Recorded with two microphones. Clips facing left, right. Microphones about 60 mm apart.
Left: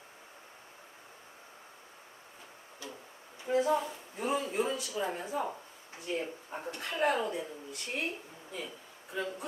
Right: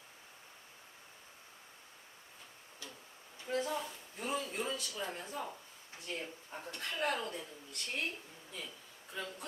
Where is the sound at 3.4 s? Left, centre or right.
Centre.